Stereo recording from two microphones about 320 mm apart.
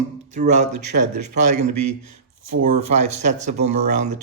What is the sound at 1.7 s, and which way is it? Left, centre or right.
A man's voice, right.